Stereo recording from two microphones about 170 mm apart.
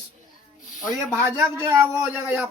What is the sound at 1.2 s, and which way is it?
Speech, 15° right (ahead or behind).